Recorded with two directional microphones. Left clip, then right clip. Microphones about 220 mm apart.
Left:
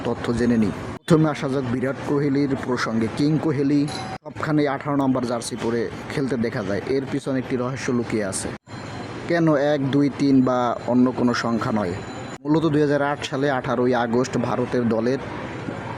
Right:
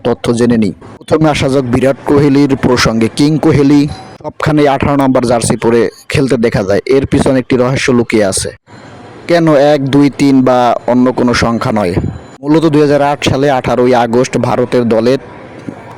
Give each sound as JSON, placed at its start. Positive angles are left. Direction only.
{"t": 0.0, "sound": "speech", "side_deg": -40}